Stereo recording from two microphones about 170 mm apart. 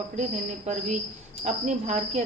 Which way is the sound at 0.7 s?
45° right (ahead or behind).